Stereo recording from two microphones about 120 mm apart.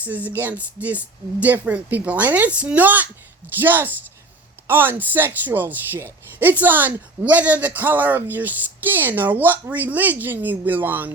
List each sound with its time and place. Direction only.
0.0 s speech: 15° right (ahead or behind)